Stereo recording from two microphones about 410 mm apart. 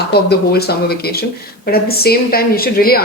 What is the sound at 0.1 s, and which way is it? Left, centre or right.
Speech, left.